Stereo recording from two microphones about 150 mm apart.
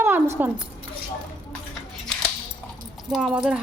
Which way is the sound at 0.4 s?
10° right (ahead or behind).